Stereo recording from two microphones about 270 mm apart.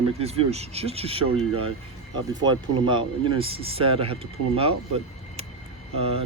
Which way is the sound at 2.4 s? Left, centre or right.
Centre.